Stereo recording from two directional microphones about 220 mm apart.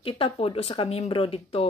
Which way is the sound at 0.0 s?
25° left (ahead or behind).